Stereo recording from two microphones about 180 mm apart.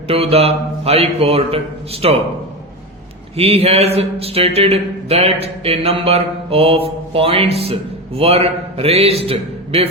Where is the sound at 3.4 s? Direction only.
35° right (ahead or behind).